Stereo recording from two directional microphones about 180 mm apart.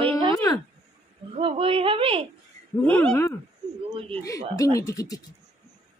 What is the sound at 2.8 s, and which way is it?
A child's voice, 5° left (ahead or behind).